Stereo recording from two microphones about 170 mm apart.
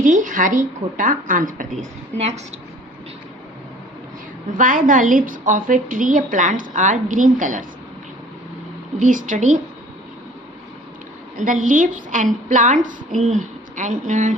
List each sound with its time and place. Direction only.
0.0 s a woman's voice: 50° right (ahead or behind)
2.1 s a woman's voice: 40° right (ahead or behind)
4.5 s a woman's voice: 50° right (ahead or behind)
9.0 s a woman's voice: 50° right (ahead or behind)
11.3 s a woman's voice: 50° right (ahead or behind)